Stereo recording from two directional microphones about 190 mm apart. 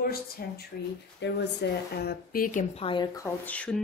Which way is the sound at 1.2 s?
65° left (ahead or behind).